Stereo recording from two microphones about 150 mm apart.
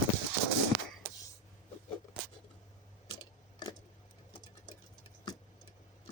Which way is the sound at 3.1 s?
25° left (ahead or behind).